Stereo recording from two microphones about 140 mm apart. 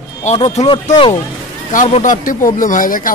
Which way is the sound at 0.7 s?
35° left (ahead or behind).